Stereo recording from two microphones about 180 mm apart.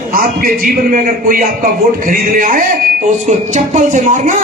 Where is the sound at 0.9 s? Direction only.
50° right (ahead or behind).